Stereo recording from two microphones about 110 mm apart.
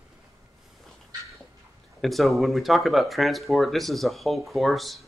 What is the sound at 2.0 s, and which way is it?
Speech, centre (ahead or behind).